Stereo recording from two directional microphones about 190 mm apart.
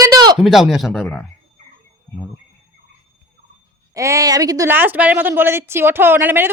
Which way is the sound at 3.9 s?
15° right (ahead or behind).